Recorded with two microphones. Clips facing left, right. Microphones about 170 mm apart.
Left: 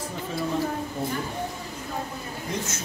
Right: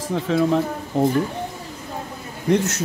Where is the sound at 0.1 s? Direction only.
80° right.